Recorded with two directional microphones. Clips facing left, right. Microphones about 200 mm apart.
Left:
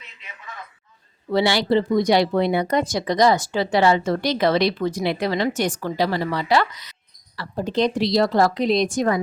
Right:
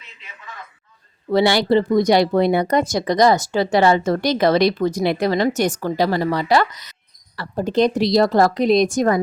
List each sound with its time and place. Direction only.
1.3 s speech: 45° right (ahead or behind)